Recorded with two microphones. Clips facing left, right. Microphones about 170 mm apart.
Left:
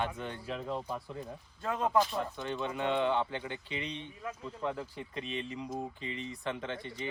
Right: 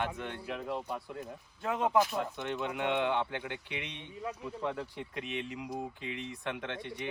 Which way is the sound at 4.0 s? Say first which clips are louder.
Right 2 dB; 15° right (ahead or behind).